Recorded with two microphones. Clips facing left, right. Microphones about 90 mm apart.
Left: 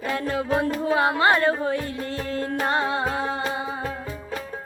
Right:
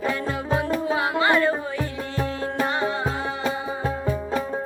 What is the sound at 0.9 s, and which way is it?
Music, 45° left (ahead or behind).